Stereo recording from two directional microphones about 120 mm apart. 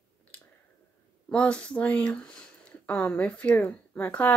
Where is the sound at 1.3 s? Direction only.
10° left (ahead or behind).